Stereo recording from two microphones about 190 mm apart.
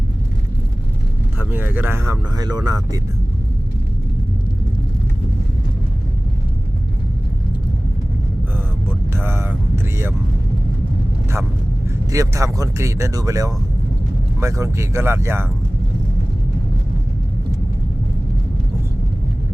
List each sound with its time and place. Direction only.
1.4 s speech: 10° right (ahead or behind)
9.1 s vehicle: 10° right (ahead or behind)
12.1 s speech: 15° right (ahead or behind)